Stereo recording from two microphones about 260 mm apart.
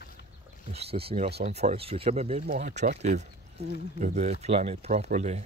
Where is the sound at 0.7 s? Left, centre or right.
Right.